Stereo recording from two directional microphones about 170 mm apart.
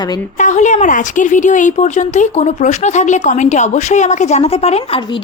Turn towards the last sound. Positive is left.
turn(degrees=35)  # may be behind; listen again after turning